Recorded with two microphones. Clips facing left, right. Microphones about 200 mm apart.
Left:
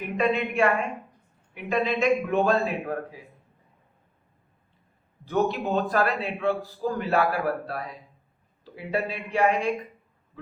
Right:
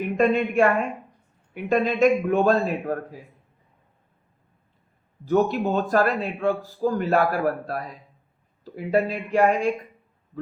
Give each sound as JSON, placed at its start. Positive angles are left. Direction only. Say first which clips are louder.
{"t": 0.2, "sound": "a man's voice", "louder": "right 4 dB", "side_deg": -45}
{"t": 1.7, "sound": "a man's voice", "louder": "right 4 dB", "side_deg": -45}
{"t": 5.2, "sound": "a man's voice", "louder": "right 4 dB", "side_deg": -45}